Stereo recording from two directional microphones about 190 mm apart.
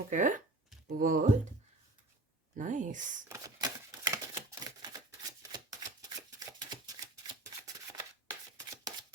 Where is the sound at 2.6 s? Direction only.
40° right (ahead or behind).